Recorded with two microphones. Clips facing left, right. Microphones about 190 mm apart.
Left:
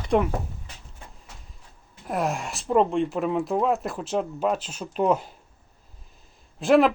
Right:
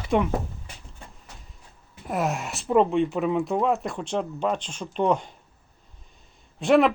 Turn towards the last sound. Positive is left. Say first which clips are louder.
# left 1 dB
turn(degrees=0)  # may be behind; listen again after turning